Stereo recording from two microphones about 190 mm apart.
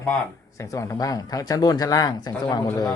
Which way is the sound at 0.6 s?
15° left (ahead or behind).